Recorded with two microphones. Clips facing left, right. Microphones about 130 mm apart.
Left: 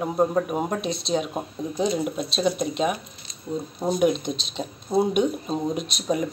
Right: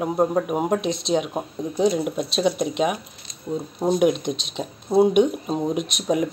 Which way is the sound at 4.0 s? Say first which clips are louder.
Right 2 dB; 15° right (ahead or behind).